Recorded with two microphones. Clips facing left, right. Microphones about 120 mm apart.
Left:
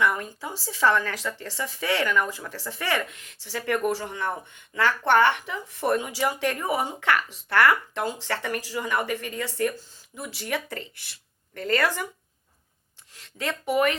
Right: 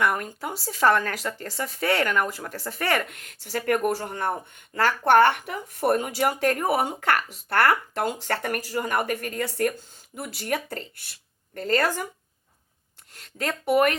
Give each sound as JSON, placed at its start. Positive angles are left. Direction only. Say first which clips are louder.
{"t": 0.0, "sound": "speech", "louder": "even", "side_deg": -55}
{"t": 6.9, "sound": "speech", "louder": "even", "side_deg": -40}
{"t": 13.4, "sound": "speech", "louder": "right 2 dB", "side_deg": -50}